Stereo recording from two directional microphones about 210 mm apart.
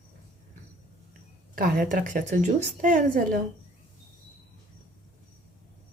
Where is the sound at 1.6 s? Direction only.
40° right (ahead or behind).